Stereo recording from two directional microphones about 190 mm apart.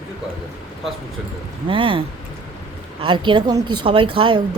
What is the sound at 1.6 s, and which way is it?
Speech, 25° right (ahead or behind).